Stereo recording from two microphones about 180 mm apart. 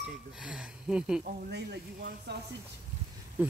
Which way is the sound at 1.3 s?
60° right (ahead or behind).